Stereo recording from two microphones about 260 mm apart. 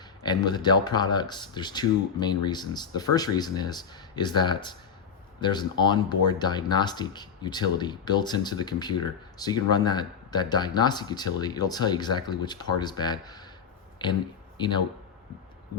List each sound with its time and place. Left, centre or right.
0.2 s speech: centre
14.6 s speech: centre